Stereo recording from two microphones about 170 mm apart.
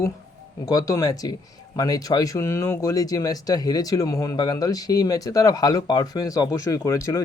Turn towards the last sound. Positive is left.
turn(degrees=15)  # may be behind; listen again after turning